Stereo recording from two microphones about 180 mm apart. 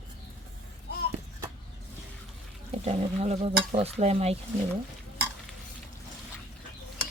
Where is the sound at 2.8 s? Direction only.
35° right (ahead or behind).